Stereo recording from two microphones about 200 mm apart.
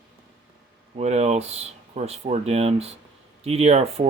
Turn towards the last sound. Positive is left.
turn(degrees=-30)  # may be behind; listen again after turning